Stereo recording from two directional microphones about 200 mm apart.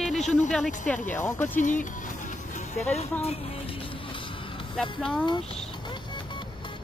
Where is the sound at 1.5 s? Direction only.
40° left (ahead or behind).